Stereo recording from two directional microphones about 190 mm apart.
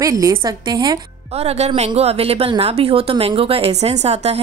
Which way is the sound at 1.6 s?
35° right (ahead or behind).